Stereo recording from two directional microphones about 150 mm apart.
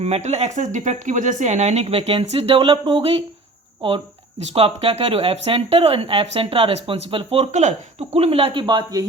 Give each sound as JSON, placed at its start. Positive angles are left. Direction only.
{"t": 0.0, "sound": "speech", "side_deg": -45}
{"t": 4.4, "sound": "speech", "side_deg": -40}